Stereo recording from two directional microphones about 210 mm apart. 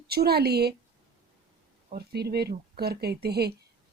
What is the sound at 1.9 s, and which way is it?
A woman's voice, 50° right (ahead or behind).